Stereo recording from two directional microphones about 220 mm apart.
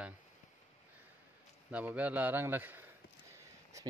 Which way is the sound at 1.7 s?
5° right (ahead or behind).